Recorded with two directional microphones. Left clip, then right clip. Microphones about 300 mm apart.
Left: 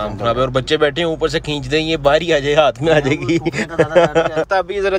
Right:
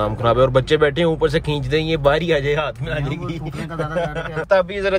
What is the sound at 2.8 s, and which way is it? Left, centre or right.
A man's voice, left.